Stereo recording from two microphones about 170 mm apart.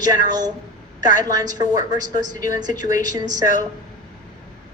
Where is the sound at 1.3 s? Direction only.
20° right (ahead or behind).